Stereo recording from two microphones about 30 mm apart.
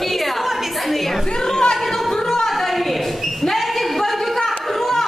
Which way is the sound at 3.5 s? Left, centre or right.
Centre.